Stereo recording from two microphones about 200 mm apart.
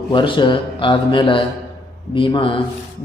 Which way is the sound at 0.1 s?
25° left (ahead or behind).